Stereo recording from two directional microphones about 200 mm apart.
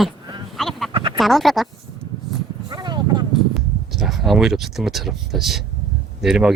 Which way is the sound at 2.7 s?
20° right (ahead or behind).